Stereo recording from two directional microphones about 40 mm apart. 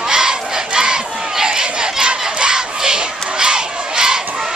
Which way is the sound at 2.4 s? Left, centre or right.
Centre.